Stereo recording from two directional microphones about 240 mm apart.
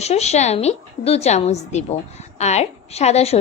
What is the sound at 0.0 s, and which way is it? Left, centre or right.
A woman's voice, left.